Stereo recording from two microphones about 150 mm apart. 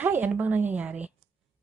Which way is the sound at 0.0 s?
10° right (ahead or behind).